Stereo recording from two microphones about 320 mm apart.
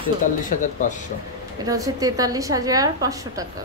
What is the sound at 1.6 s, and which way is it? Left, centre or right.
A woman's voice, centre.